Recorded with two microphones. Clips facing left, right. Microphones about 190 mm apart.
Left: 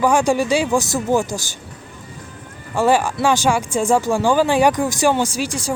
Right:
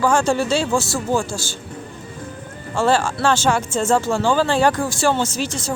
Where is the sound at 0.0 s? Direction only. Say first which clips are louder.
Left 2 dB; 15° left (ahead or behind).